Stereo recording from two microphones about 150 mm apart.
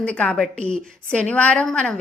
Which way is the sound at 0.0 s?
10° left (ahead or behind).